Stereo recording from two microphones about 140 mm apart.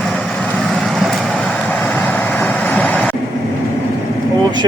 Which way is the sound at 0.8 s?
Centre (ahead or behind).